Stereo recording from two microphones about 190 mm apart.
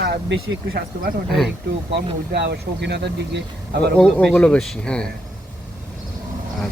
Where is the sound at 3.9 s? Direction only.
5° left (ahead or behind).